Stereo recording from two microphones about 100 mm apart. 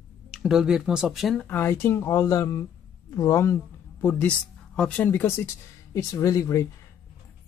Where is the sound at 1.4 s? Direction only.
20° left (ahead or behind).